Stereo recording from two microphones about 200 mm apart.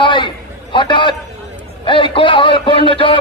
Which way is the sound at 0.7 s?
25° left (ahead or behind).